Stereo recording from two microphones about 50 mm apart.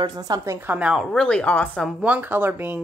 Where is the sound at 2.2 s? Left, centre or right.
Right.